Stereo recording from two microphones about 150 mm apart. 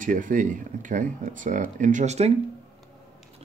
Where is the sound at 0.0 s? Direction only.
60° right (ahead or behind).